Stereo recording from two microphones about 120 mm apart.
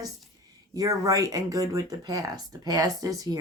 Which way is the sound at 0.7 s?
30° right (ahead or behind).